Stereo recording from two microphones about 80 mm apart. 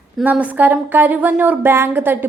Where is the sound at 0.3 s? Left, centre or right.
Centre.